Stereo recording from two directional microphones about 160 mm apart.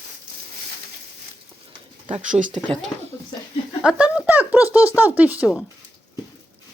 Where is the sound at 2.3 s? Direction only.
55° right (ahead or behind).